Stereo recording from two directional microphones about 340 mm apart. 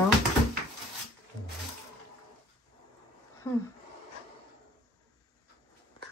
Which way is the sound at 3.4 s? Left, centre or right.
Centre.